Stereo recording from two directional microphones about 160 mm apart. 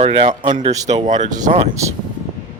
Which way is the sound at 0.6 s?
45° right (ahead or behind).